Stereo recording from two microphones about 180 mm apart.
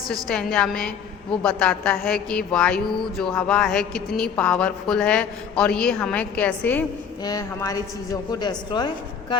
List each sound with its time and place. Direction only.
0.3 s speech: 5° left (ahead or behind)
7.3 s a woman's voice: 20° left (ahead or behind)